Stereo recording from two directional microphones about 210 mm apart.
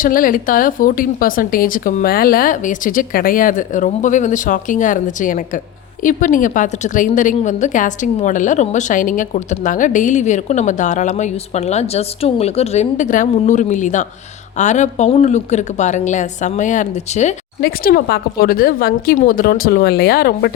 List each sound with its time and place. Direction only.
0.0 s a woman's voice: 40° left (ahead or behind)
17.6 s a woman's voice: 45° left (ahead or behind)